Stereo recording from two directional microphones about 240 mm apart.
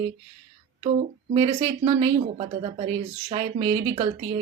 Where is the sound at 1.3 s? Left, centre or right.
Right.